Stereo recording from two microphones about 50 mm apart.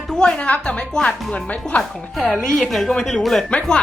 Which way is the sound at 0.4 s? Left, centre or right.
Left.